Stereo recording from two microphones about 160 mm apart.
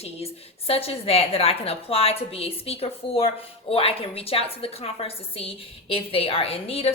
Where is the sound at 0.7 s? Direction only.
40° left (ahead or behind).